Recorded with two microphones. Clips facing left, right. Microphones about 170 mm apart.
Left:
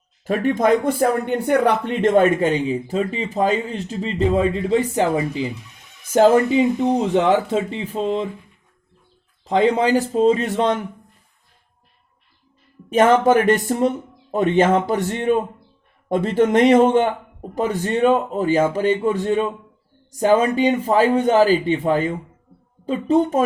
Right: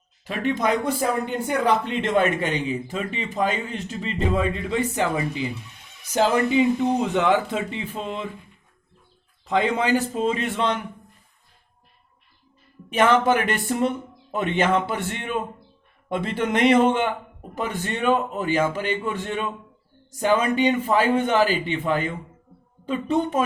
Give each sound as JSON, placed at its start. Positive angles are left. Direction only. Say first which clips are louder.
{"t": 0.3, "sound": "speech", "louder": "left 6 dB", "side_deg": 45}
{"t": 2.2, "sound": "a man's voice", "louder": "left 6 dB", "side_deg": 35}
{"t": 6.1, "sound": "a man's voice", "louder": "left 6 dB", "side_deg": 50}
{"t": 9.4, "sound": "a man's voice", "louder": "left 5 dB", "side_deg": 35}
{"t": 12.9, "sound": "a man's voice", "louder": "left 5 dB", "side_deg": 40}